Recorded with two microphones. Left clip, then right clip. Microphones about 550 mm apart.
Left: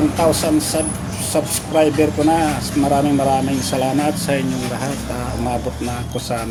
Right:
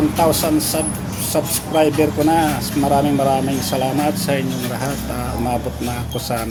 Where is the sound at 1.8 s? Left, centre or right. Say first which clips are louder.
Even; right.